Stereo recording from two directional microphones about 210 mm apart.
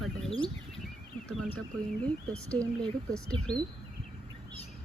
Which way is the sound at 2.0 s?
5° left (ahead or behind).